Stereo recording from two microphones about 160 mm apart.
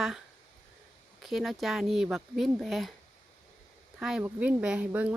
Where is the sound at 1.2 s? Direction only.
Centre (ahead or behind).